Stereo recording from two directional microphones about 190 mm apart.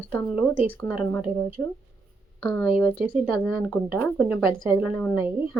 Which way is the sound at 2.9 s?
10° right (ahead or behind).